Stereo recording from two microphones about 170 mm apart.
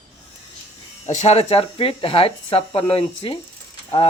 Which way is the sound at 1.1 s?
40° left (ahead or behind).